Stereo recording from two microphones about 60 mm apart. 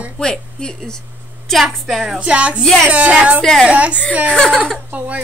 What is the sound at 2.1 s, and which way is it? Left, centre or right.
A woman's voice, centre.